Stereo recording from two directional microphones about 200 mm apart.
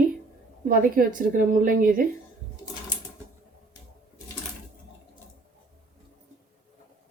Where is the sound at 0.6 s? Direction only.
45° right (ahead or behind).